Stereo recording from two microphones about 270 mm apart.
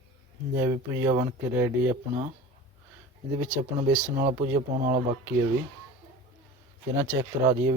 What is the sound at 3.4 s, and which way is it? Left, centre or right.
Speech, centre.